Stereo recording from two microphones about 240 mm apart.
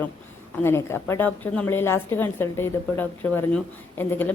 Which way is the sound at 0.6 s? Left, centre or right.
Centre.